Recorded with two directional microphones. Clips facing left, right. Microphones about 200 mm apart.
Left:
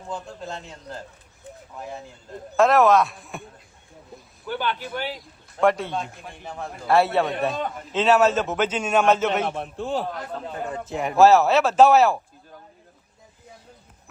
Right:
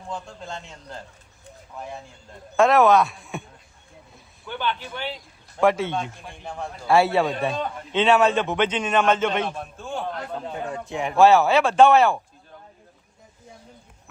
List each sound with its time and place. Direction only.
0.1 s a man's voice: 5° left (ahead or behind)
2.6 s a man's voice: centre (ahead or behind)
4.6 s speech: 40° left (ahead or behind)
5.5 s a man's voice: centre (ahead or behind)